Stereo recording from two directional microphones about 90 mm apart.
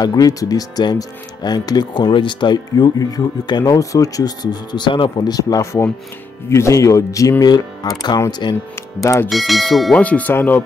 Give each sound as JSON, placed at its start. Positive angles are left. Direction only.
{"t": 0.0, "sound": "speech", "side_deg": 45}
{"t": 9.3, "sound": "speech", "side_deg": 0}
{"t": 9.9, "sound": "speech", "side_deg": 15}